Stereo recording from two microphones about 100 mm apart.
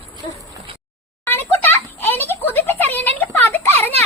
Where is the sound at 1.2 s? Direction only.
20° left (ahead or behind).